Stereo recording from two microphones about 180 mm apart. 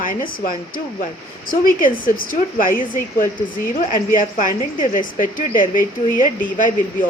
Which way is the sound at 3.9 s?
45° left (ahead or behind).